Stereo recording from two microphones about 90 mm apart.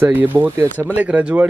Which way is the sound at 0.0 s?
20° right (ahead or behind).